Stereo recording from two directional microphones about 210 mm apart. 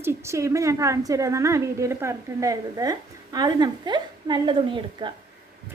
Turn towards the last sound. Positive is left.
turn(degrees=-20)  # may be behind; listen again after turning